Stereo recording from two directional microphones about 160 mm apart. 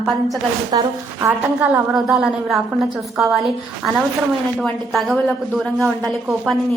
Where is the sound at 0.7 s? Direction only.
30° right (ahead or behind).